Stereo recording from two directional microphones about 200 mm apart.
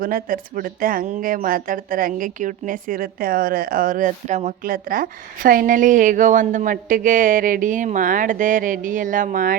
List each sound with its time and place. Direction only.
0.0 s a woman's voice: 45° right (ahead or behind)